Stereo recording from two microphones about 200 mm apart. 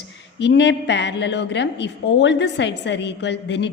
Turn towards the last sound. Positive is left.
turn(degrees=60)  # may be behind; listen again after turning